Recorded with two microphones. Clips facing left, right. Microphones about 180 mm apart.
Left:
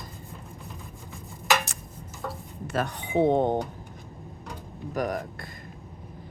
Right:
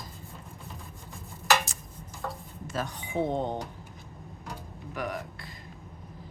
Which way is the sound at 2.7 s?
60° left (ahead or behind).